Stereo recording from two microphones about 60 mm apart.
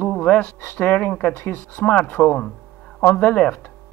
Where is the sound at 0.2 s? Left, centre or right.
Left.